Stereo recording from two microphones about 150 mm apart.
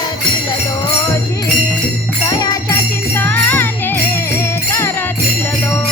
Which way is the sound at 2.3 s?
20° left (ahead or behind).